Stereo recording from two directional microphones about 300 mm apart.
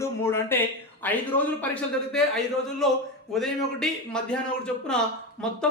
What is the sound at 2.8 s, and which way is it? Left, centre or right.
Speech, centre.